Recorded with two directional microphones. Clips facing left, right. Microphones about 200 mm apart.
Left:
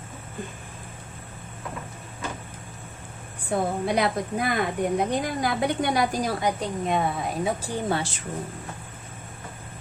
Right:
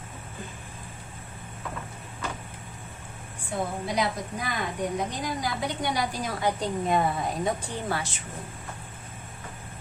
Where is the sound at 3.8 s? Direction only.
60° left (ahead or behind).